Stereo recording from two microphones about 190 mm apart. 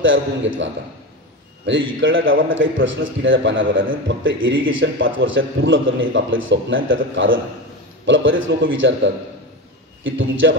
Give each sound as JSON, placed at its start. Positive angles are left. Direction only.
{"t": 0.0, "sound": "a man's voice", "side_deg": -80}
{"t": 1.7, "sound": "a man's voice", "side_deg": -85}